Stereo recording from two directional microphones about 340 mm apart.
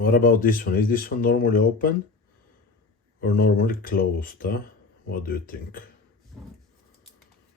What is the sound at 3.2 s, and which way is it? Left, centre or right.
Speech, left.